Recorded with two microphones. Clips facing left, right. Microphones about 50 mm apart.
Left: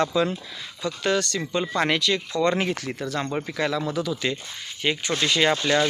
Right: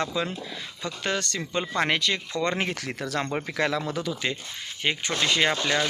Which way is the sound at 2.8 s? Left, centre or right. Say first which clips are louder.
Left 1 dB; right.